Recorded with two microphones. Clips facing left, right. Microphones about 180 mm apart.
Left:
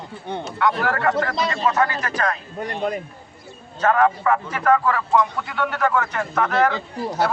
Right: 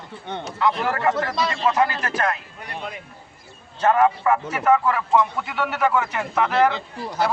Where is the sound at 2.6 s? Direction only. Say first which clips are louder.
Left 9 dB; 45° left (ahead or behind).